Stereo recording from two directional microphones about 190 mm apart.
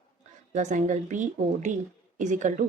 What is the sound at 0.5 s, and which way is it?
Speech, 40° right (ahead or behind).